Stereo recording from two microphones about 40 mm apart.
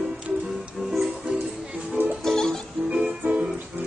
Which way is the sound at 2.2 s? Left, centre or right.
Centre.